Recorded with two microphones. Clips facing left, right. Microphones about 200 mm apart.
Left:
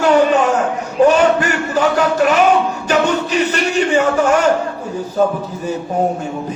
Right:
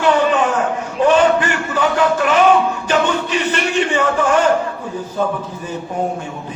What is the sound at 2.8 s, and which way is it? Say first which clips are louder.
Music: left 2 dB; 40° left (ahead or behind).